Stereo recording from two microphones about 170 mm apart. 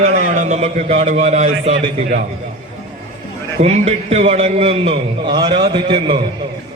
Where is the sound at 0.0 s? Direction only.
45° right (ahead or behind).